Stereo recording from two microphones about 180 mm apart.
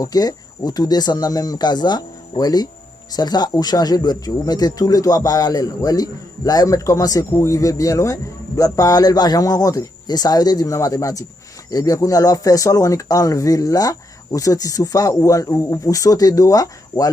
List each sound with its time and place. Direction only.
0.0 s speech: 20° left (ahead or behind)